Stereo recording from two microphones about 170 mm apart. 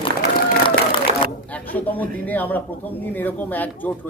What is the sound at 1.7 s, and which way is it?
Speech, 10° left (ahead or behind).